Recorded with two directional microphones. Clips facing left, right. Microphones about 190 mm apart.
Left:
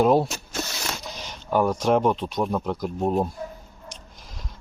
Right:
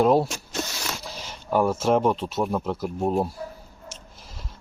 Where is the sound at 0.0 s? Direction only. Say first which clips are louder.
Even; centre (ahead or behind).